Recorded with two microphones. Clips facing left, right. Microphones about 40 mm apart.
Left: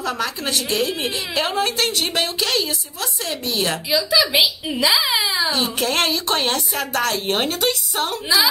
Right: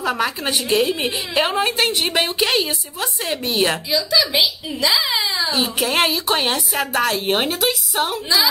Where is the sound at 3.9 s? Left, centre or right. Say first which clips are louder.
Left 1 dB; centre.